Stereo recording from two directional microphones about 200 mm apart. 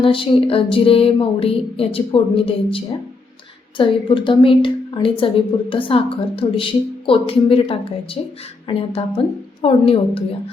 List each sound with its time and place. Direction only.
0.0 s a woman's voice: 25° left (ahead or behind)